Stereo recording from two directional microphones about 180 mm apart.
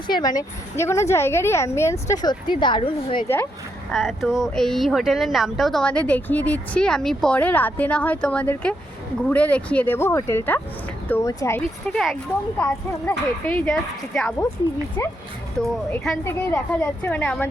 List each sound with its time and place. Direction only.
0.1 s a woman's voice: 25° left (ahead or behind)
3.2 s a woman's voice: 10° left (ahead or behind)
3.9 s a woman's voice: centre (ahead or behind); by 11.6 s 15° left (ahead or behind)
11.9 s a woman's voice: centre (ahead or behind)
15.9 s a woman's voice: 10° left (ahead or behind)